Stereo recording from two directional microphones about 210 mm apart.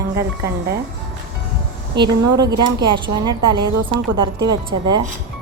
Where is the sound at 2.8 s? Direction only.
20° right (ahead or behind).